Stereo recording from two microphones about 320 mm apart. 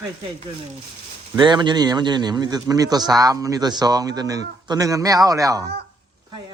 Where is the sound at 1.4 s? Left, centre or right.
Centre.